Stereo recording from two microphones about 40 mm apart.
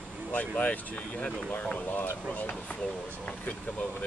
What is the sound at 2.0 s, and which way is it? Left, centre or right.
Speech, left.